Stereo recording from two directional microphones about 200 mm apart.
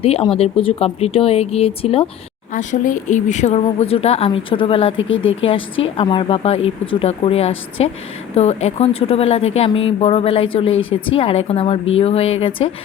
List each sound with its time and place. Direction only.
0.0 s speech: 30° left (ahead or behind)
2.6 s speech: 40° left (ahead or behind)
4.9 s speech: 75° left (ahead or behind)
6.0 s speech: 25° left (ahead or behind)